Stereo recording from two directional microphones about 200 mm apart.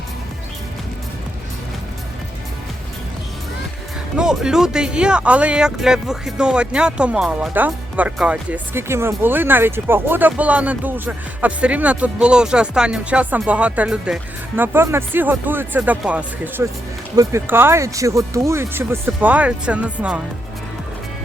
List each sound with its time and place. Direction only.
4.2 s speech: 5° right (ahead or behind)